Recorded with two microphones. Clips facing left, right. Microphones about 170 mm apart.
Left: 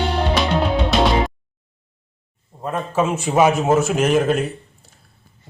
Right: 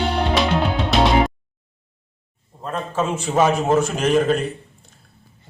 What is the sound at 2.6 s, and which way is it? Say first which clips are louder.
A man's voice: left 3 dB; 15° left (ahead or behind).